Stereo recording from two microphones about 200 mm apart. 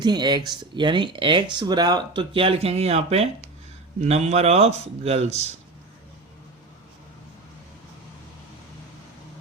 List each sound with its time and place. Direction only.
0.0 s speech: 20° right (ahead or behind)